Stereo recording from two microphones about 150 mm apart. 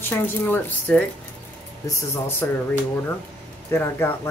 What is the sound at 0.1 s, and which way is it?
Speech, 15° left (ahead or behind).